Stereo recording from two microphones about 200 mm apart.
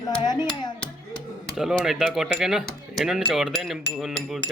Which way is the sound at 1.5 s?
Centre (ahead or behind).